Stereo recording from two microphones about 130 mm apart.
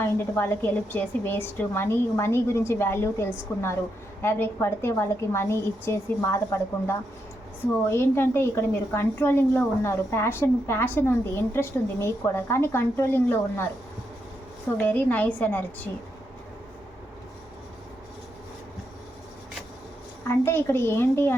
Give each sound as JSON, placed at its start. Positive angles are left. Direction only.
{"t": 0.0, "sound": "a woman's voice", "side_deg": 15}
{"t": 14.8, "sound": "a woman's voice", "side_deg": 15}
{"t": 20.2, "sound": "a woman's voice", "side_deg": 20}